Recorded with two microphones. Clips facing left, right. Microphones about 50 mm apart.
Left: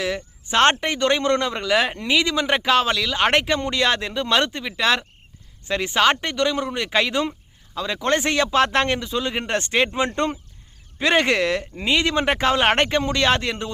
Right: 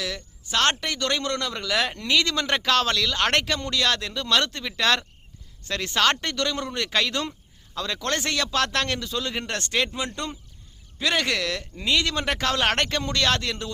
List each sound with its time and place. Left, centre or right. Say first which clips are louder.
0.0 s speech: left 6 dB; left